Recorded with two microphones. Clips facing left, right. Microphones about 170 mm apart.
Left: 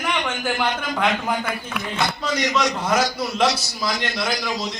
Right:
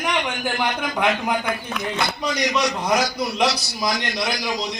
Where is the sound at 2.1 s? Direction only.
15° right (ahead or behind).